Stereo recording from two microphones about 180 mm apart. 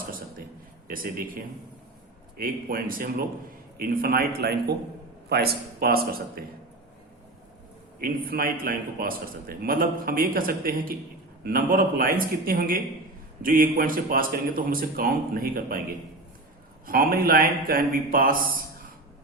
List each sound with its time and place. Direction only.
0.9 s speech: 55° right (ahead or behind)
2.4 s a man's voice: 55° right (ahead or behind)
7.9 s a man's voice: 55° right (ahead or behind)
16.8 s a man's voice: 55° right (ahead or behind)